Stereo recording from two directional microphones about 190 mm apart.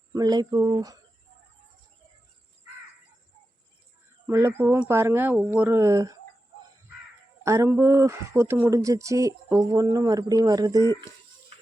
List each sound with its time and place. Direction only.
0.1 s speech: 20° right (ahead or behind)
4.3 s speech: 15° right (ahead or behind)
7.4 s speech: 15° right (ahead or behind)